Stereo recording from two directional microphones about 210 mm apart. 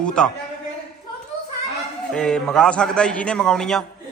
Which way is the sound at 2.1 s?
5° left (ahead or behind).